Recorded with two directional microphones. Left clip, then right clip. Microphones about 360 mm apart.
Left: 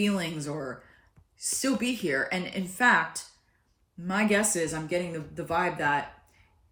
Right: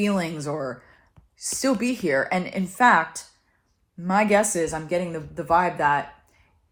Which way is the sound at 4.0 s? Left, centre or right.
Centre.